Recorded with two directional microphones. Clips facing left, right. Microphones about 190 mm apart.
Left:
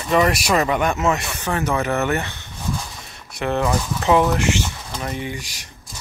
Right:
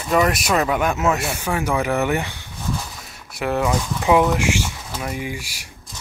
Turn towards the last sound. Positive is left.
turn(degrees=-10)  # may be behind; listen again after turning